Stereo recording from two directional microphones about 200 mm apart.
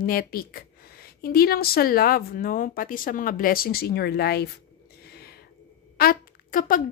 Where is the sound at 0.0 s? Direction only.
45° left (ahead or behind).